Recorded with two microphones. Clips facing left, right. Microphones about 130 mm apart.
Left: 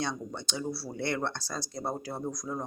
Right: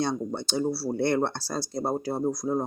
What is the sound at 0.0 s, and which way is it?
Speech, 35° right (ahead or behind).